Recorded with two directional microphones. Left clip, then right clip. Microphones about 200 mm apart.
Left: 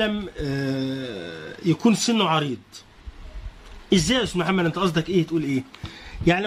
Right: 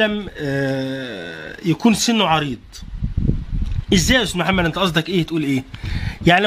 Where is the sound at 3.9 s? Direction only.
40° right (ahead or behind).